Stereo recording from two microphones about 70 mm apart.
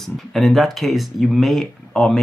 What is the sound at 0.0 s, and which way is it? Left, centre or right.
Speech, centre.